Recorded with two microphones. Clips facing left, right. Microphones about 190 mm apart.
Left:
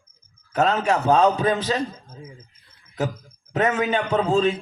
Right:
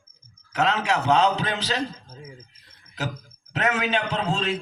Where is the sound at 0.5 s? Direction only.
80° right.